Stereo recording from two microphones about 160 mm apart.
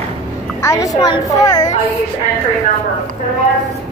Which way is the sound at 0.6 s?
20° left (ahead or behind).